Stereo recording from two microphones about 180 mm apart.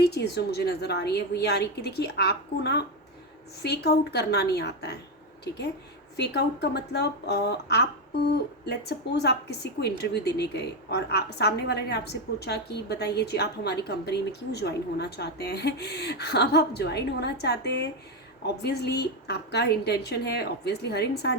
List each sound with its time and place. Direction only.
0.0 s a woman's voice: 65° left (ahead or behind)
6.1 s a woman's voice: 65° left (ahead or behind)